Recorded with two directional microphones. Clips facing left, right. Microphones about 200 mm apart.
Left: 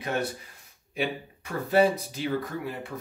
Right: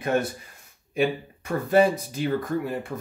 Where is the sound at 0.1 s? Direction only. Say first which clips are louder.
Right 5 dB; 50° right (ahead or behind).